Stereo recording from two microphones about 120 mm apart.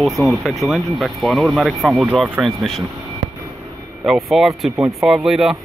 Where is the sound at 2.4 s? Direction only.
Centre (ahead or behind).